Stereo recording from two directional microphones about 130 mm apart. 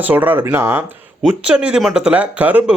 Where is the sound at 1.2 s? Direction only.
10° right (ahead or behind).